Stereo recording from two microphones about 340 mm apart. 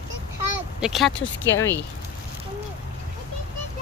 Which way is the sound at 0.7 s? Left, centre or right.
Centre.